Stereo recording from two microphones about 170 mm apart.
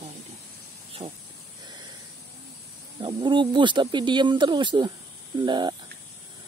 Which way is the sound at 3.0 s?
25° right (ahead or behind).